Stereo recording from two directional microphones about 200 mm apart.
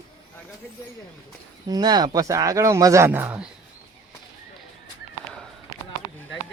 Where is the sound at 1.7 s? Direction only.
20° right (ahead or behind).